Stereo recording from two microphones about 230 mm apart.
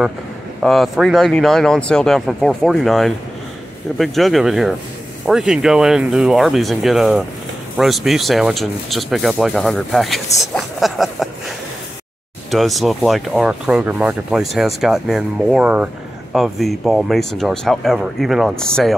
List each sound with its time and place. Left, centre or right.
0.6 s speech: centre
12.4 s speech: centre